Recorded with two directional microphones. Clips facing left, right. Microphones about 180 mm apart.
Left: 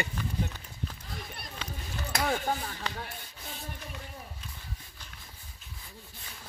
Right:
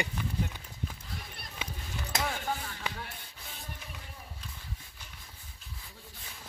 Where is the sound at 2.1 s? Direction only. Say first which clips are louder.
Left 2 dB; 20° right (ahead or behind).